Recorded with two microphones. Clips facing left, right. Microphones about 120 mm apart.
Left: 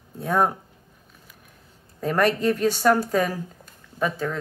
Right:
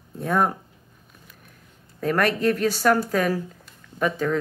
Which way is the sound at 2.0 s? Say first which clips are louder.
Even; 15° left (ahead or behind).